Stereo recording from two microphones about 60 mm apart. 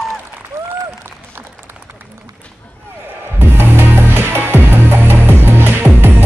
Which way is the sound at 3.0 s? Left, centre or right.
Right.